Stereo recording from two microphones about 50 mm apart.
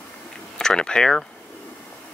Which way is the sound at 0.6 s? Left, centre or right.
Centre.